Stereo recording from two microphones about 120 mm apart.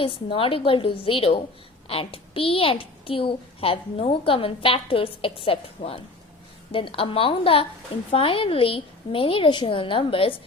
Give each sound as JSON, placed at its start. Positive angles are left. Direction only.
{"t": 0.0, "sound": "a child's voice", "side_deg": 45}